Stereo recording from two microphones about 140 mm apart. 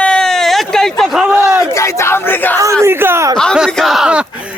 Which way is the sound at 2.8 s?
15° right (ahead or behind).